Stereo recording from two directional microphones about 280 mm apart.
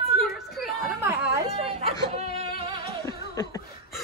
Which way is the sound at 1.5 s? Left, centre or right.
Right.